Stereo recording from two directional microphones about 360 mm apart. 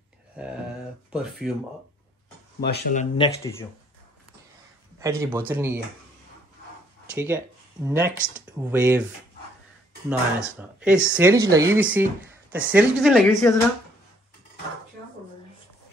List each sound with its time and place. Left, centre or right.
0.4 s speech: centre
2.6 s speech: left
4.9 s a man's voice: centre
7.2 s speech: centre
10.0 s speech: centre